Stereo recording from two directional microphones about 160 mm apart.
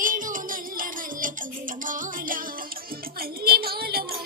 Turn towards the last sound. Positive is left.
turn(degrees=-70)  # may be behind; listen again after turning